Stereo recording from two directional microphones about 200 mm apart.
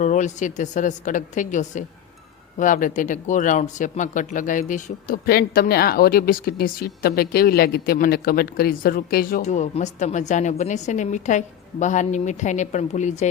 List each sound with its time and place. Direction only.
0.0 s speech: 40° left (ahead or behind)